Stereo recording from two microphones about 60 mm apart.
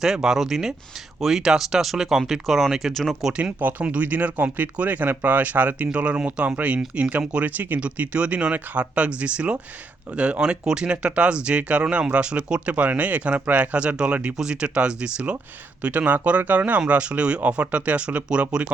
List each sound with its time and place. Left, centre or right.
0.0 s speech: centre
3.3 s speech: centre